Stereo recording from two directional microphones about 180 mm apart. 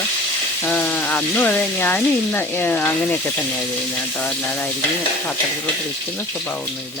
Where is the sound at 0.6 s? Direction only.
10° left (ahead or behind).